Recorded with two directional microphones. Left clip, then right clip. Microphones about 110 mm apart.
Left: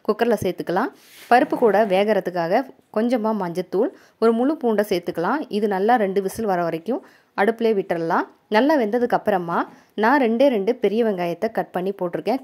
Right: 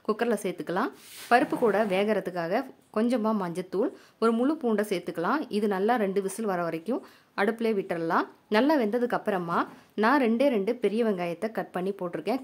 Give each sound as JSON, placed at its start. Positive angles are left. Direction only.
{"t": 0.0, "sound": "a woman's voice", "side_deg": 50}